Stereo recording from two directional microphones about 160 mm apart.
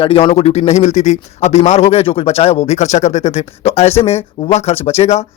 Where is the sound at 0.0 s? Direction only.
35° left (ahead or behind).